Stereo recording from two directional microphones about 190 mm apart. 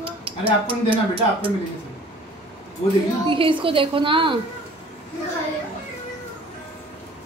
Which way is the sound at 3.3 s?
25° right (ahead or behind).